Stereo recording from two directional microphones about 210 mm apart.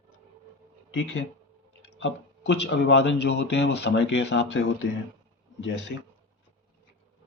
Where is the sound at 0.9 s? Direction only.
65° left (ahead or behind).